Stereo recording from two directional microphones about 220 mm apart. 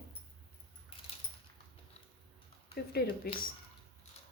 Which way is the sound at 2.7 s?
45° left (ahead or behind).